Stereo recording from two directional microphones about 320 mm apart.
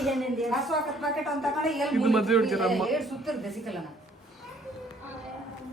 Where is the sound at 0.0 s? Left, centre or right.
Centre.